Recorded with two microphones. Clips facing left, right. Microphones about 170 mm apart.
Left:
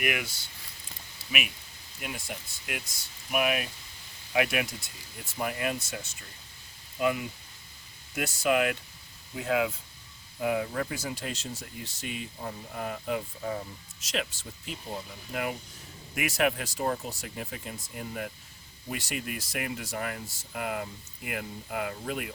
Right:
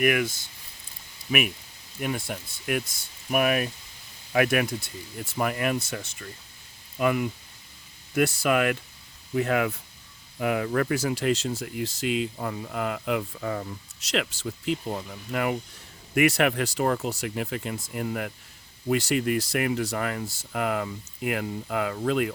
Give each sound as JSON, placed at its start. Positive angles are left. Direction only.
{"t": 0.0, "sound": "speech", "side_deg": -50}
{"t": 2.0, "sound": "speech", "side_deg": -55}
{"t": 5.4, "sound": "speech", "side_deg": -65}
{"t": 7.0, "sound": "speech", "side_deg": -60}
{"t": 10.4, "sound": "speech", "side_deg": -80}
{"t": 14.9, "sound": "speech", "side_deg": -70}